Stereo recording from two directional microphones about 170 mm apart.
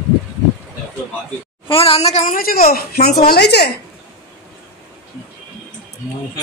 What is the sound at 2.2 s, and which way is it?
A woman's voice, 55° left (ahead or behind).